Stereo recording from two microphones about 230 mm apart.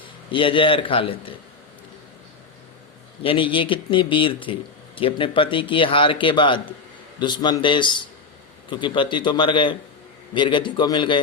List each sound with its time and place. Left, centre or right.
0.0 s a man's voice: left
3.2 s a man's voice: left